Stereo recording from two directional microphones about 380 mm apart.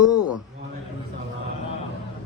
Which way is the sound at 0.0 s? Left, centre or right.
Left.